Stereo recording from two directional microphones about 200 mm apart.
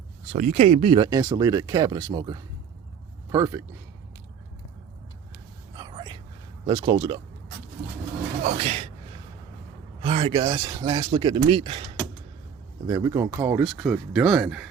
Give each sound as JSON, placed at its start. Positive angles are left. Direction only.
{"t": 0.3, "sound": "speech", "side_deg": -40}
{"t": 5.7, "sound": "whispering", "side_deg": -20}
{"t": 6.7, "sound": "speech", "side_deg": -25}
{"t": 8.4, "sound": "speech", "side_deg": -30}
{"t": 10.0, "sound": "speech", "side_deg": -25}